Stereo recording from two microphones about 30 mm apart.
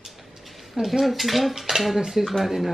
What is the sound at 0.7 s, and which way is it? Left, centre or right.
Speech, centre.